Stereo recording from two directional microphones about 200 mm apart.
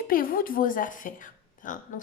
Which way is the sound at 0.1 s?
45° left (ahead or behind).